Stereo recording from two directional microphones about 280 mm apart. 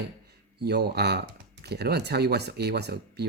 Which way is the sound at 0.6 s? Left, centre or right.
Right.